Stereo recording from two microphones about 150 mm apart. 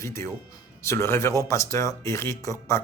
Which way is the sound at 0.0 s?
20° left (ahead or behind).